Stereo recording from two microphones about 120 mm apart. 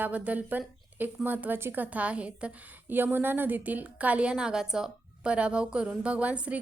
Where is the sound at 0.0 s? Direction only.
10° right (ahead or behind).